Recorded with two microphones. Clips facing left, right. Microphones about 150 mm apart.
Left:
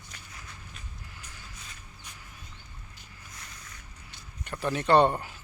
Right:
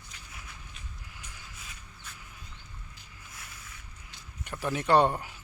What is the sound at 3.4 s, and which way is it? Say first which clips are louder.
Boat: even; 5° right (ahead or behind).